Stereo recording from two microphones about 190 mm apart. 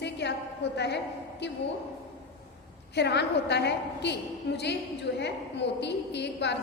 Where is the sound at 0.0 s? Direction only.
65° left (ahead or behind).